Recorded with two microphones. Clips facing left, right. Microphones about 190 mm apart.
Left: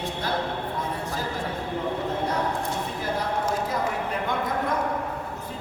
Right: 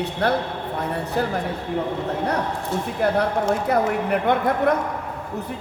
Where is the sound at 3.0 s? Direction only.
65° right (ahead or behind).